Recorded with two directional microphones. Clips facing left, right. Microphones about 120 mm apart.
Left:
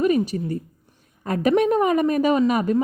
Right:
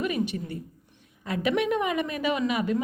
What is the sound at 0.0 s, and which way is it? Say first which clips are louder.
A woman's voice: left 8 dB; 40° left (ahead or behind).